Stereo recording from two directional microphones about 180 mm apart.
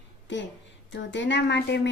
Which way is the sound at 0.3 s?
80° left.